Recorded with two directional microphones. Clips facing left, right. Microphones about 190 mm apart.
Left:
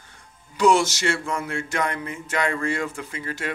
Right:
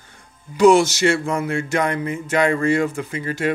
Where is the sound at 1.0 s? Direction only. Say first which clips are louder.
Right 7 dB; 20° right (ahead or behind).